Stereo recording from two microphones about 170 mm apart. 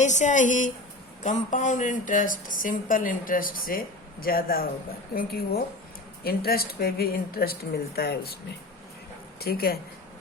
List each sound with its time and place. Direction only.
0.0 s a woman's voice: 45° left (ahead or behind); by 8.4 s 65° left (ahead or behind)
9.4 s speech: 65° left (ahead or behind)